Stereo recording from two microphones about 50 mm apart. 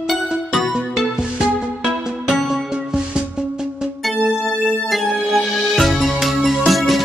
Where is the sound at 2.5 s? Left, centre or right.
Centre.